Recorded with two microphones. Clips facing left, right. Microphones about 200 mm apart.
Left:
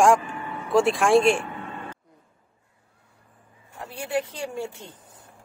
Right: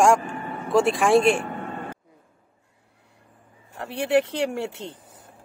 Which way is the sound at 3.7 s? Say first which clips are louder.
Right 7 dB; 75° right (ahead or behind).